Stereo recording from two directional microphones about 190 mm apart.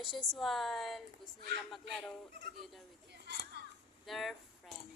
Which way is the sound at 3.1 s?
60° right (ahead or behind).